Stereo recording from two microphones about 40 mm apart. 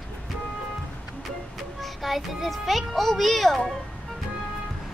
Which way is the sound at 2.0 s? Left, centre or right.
Centre.